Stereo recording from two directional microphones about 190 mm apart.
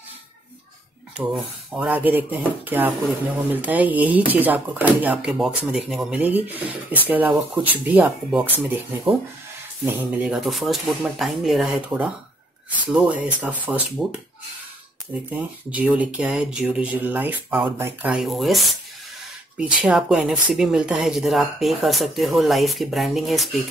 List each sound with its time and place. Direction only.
1.1 s speech: 5° right (ahead or behind)
15.3 s speech: 5° right (ahead or behind)
19.8 s speech: 5° right (ahead or behind)